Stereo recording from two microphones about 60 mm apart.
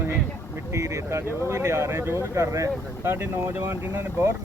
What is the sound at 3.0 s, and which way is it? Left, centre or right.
Speech, right.